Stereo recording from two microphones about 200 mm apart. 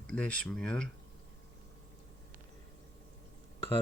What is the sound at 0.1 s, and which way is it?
Speech, 5° left (ahead or behind).